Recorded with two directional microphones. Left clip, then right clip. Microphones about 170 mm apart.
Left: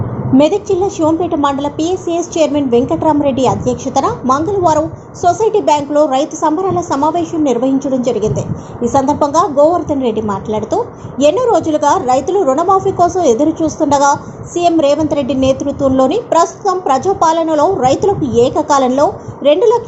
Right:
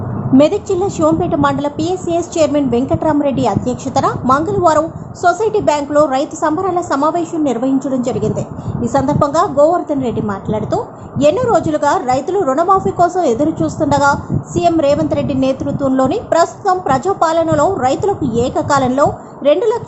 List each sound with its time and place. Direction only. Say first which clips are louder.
0.3 s a woman's voice: left 1 dB; 10° right (ahead or behind)
8.0 s a woman's voice: left 3 dB; 50° right (ahead or behind)
8.9 s a woman's voice: left 2 dB; 5° right (ahead or behind)